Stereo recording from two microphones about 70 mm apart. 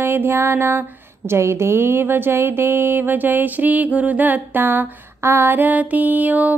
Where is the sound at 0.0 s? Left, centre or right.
Right.